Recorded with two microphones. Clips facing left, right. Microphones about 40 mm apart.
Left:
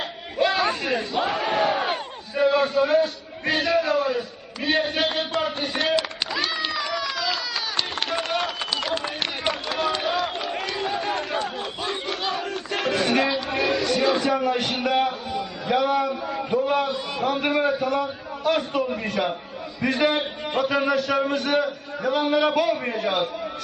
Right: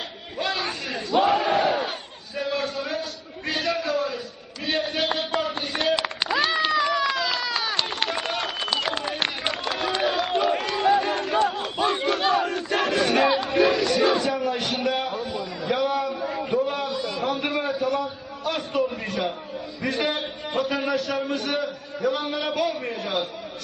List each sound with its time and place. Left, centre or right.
0.3 s chatter: centre
1.1 s crowd: centre
2.3 s a sound: centre
6.0 s a sound: centre
7.0 s run: centre
8.1 s a sound: centre
9.6 s run: centre
10.0 s crowd: centre
11.4 s battle cry: centre
13.7 s music: centre
14.4 s a sound: centre
17.4 s a man's voice: centre